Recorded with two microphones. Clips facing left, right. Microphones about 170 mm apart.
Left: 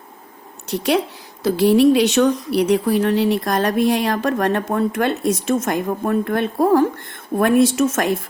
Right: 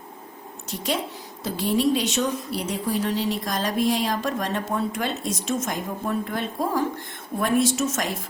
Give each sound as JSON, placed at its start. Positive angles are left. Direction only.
{"t": 0.7, "sound": "a woman's voice", "side_deg": 70}